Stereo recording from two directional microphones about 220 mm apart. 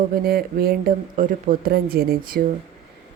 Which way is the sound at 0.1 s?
45° right (ahead or behind).